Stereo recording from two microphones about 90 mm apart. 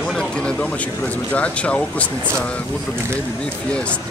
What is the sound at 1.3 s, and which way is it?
Speech, 15° left (ahead or behind).